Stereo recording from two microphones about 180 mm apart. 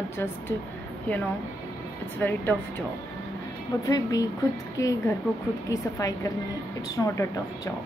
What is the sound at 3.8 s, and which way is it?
A woman's voice, 20° left (ahead or behind).